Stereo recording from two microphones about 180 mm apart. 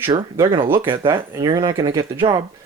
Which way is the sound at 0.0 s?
15° right (ahead or behind).